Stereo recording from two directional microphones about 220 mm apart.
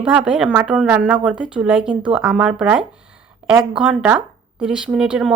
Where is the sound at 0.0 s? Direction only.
5° right (ahead or behind).